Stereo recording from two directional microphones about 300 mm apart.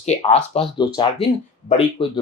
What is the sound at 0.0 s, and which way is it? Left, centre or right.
Speech, left.